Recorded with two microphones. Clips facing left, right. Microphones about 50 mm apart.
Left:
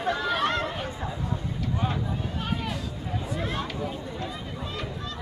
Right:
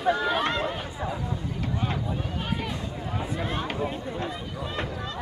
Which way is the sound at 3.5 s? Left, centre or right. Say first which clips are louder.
Right 2 dB; right.